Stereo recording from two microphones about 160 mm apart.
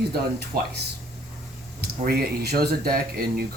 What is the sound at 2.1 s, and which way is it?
Speech, 80° right.